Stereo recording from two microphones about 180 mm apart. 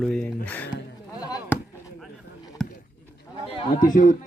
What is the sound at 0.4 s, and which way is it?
Speech, 10° left (ahead or behind).